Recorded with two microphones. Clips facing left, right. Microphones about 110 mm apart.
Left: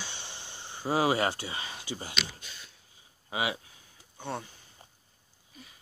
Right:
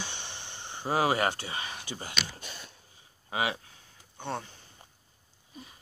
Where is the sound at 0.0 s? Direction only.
20° right (ahead or behind).